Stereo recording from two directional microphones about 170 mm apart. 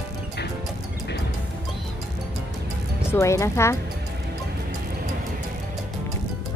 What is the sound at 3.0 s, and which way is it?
Speech, 15° left (ahead or behind).